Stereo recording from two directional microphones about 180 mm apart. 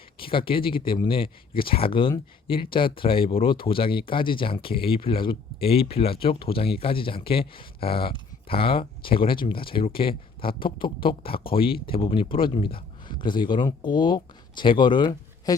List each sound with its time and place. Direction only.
0.2 s speech: 30° left (ahead or behind)